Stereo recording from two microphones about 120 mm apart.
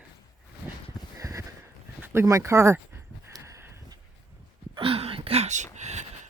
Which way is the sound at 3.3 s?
25° right (ahead or behind).